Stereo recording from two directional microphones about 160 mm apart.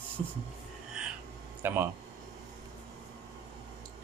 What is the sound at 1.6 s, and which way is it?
Speech, 15° right (ahead or behind).